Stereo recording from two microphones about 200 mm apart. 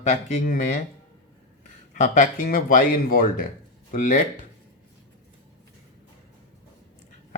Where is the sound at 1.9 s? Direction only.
40° left (ahead or behind).